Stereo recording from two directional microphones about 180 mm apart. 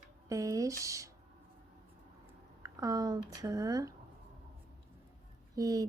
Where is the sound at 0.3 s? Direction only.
20° right (ahead or behind).